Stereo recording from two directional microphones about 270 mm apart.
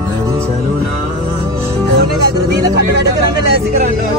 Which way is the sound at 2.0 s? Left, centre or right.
Right.